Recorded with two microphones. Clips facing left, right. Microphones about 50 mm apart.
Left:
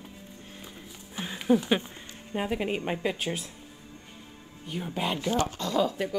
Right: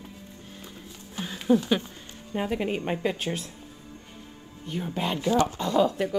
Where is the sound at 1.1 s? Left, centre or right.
Centre.